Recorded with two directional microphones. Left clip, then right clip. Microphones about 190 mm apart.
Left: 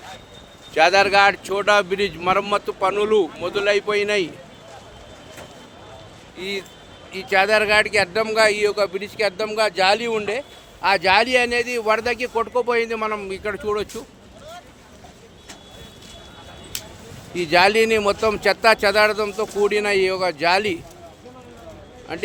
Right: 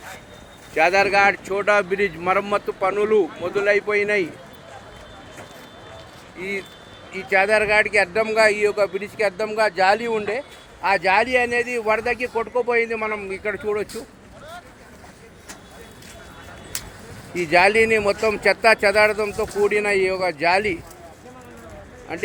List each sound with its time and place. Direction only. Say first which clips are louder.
0.7 s speech: left 2 dB; 10° left (ahead or behind)
2.9 s speech: right 1 dB; 15° left (ahead or behind)
7.3 s speech: left 1 dB; 5° left (ahead or behind)
10.8 s speech: left 1 dB; 10° left (ahead or behind)
12.3 s speech: left 1 dB; 20° left (ahead or behind)
12.6 s speech: even; 10° left (ahead or behind)
17.5 s speech: even; 10° left (ahead or behind)
22.1 s speech: even; centre (ahead or behind)